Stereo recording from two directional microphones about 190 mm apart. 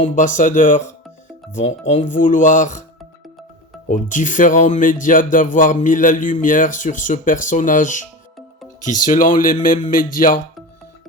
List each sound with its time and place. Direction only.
0.0 s speech: 40° left (ahead or behind)
3.8 s speech: 40° left (ahead or behind)